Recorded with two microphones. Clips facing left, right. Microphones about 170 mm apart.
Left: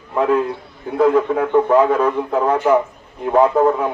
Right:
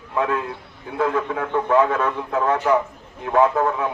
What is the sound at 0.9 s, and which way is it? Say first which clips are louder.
Speech: left 7 dB; 30° left (ahead or behind).